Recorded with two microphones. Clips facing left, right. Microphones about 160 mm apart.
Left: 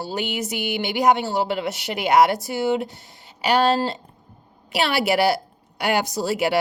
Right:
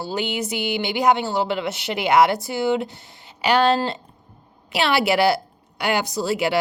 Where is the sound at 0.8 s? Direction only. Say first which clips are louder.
Left 1 dB; 45° left (ahead or behind).